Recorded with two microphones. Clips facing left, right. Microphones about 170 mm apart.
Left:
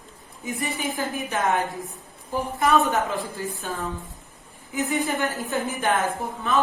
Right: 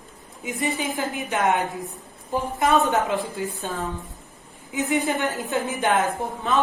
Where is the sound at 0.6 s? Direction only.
20° right (ahead or behind).